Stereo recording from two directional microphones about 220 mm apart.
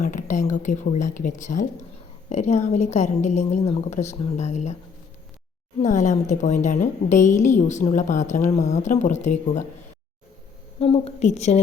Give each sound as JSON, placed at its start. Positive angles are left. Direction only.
{"t": 0.0, "sound": "a woman's voice", "side_deg": 35}
{"t": 5.8, "sound": "a woman's voice", "side_deg": 35}
{"t": 10.8, "sound": "a woman's voice", "side_deg": 25}